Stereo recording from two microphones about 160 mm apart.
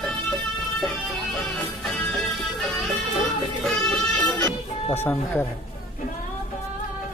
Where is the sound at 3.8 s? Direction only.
5° left (ahead or behind).